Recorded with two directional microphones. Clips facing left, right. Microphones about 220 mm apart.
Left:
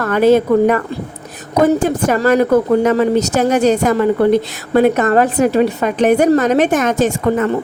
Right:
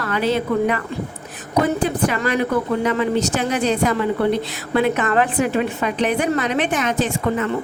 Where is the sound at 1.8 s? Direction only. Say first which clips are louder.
Left 6 dB; 45° left (ahead or behind).